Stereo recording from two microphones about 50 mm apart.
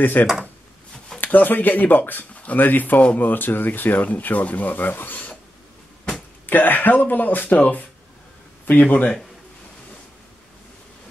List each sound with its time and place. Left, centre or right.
0.0 s speech: left
6.4 s speech: left
8.8 s speech: left